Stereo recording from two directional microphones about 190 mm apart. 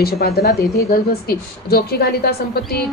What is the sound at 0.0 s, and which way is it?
A woman's voice, 55° left (ahead or behind).